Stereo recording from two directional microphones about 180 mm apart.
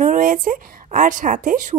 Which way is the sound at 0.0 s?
50° right (ahead or behind).